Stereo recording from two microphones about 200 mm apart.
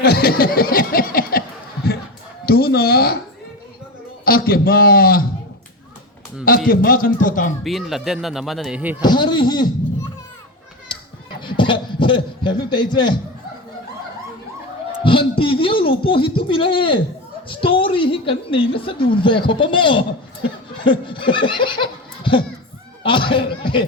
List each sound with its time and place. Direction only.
0.0 s chuckle: 50° left (ahead or behind)
2.5 s speech: 50° left (ahead or behind)
4.3 s a man's voice: 50° left (ahead or behind)
6.7 s a man's voice: 45° left (ahead or behind)
7.6 s speech: centre (ahead or behind)
9.0 s speech: 20° left (ahead or behind)
11.3 s speech: 25° left (ahead or behind)
15.4 s a woman's voice: 25° left (ahead or behind)